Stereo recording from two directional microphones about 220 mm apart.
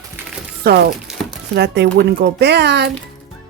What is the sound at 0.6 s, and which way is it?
Speech, 45° right (ahead or behind).